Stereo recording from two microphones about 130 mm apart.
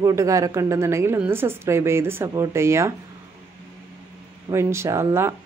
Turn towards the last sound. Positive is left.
turn(degrees=-20)  # may be behind; listen again after turning